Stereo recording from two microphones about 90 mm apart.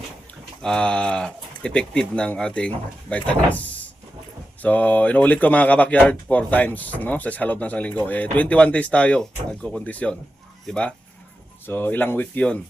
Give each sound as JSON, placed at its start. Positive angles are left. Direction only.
{"t": 0.6, "sound": "speech", "side_deg": 10}
{"t": 11.6, "sound": "speech", "side_deg": 25}